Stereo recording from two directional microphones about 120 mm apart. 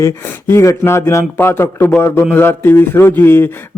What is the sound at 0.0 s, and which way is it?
A man's voice, 25° left (ahead or behind).